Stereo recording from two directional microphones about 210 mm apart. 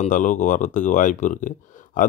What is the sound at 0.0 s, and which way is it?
Speech, 35° left (ahead or behind).